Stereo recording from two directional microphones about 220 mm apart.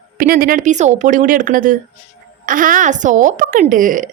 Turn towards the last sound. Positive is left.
turn(degrees=-40)  # may be behind; listen again after turning